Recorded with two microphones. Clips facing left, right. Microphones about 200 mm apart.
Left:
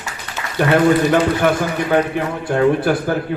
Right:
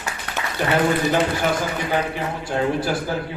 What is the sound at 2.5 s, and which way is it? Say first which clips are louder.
Speech: left 7 dB; 55° left (ahead or behind).